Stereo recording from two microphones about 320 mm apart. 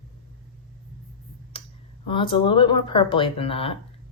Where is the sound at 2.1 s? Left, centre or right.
Centre.